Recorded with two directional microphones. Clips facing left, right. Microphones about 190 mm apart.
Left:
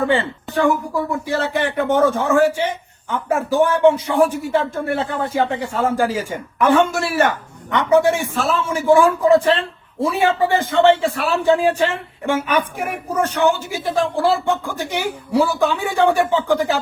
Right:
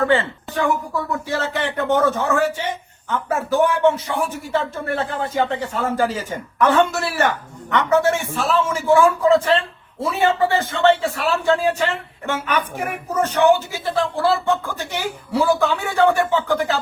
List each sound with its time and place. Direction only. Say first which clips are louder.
0.9 s a man's voice: left 3 dB; 10° left (ahead or behind)